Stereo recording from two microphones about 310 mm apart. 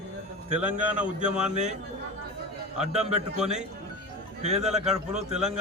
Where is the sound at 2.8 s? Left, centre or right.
Right.